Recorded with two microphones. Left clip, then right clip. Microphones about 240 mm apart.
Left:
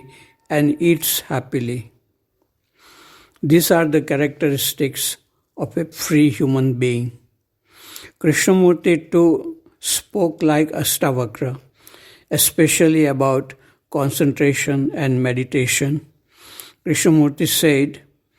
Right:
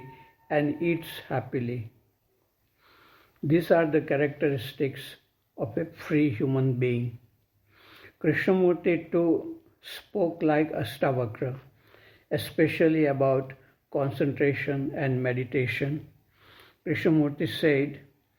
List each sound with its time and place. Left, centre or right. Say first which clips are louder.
0.1 s speech: left 6 dB; left
2.8 s a man's voice: left 11 dB; left